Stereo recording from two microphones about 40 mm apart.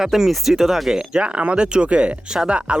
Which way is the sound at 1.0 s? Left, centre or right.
Right.